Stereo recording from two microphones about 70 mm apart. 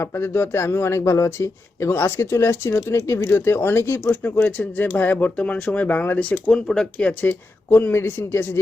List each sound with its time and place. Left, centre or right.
0.0 s speech: left
4.1 s speech: left
7.1 s speech: left